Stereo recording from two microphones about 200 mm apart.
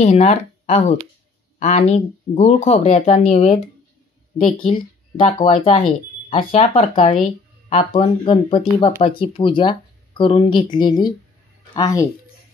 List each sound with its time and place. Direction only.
0.0 s speech: 35° left (ahead or behind)
4.6 s speech: 30° left (ahead or behind)